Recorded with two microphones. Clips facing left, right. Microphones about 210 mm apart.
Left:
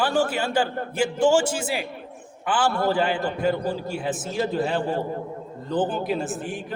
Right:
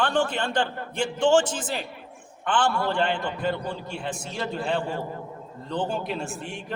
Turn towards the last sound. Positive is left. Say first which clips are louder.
# left 5 dB
turn(degrees=5)  # may be behind; listen again after turning